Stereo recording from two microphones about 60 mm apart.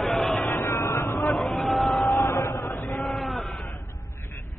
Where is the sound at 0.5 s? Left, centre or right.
Left.